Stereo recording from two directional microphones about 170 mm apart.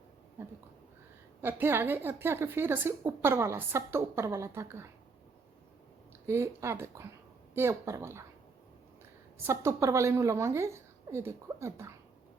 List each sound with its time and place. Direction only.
1.4 s a woman's voice: 10° right (ahead or behind)
6.2 s a woman's voice: 15° right (ahead or behind)
9.4 s a woman's voice: 15° right (ahead or behind)